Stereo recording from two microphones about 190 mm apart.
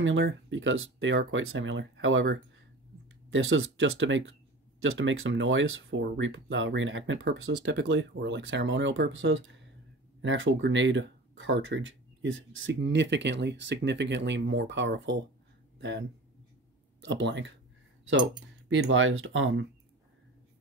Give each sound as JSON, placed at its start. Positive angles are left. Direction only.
{"t": 0.0, "sound": "speech", "side_deg": -80}
{"t": 10.2, "sound": "speech", "side_deg": -85}
{"t": 17.0, "sound": "speech", "side_deg": -70}
{"t": 18.7, "sound": "speech", "side_deg": -90}